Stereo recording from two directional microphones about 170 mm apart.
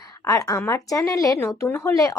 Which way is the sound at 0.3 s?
20° left (ahead or behind).